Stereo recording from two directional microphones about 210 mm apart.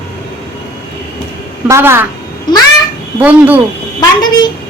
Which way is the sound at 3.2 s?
10° right (ahead or behind).